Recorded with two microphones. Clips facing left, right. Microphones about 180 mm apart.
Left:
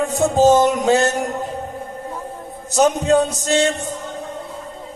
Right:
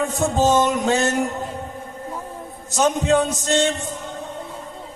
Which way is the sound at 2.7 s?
40° left (ahead or behind).